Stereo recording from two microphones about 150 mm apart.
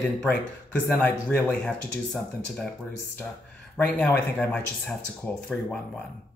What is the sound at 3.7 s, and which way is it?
Speech, 10° left (ahead or behind).